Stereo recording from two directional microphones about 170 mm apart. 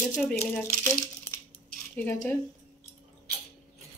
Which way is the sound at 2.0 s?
15° left (ahead or behind).